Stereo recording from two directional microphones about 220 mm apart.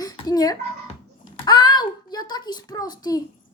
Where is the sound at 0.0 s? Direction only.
15° left (ahead or behind).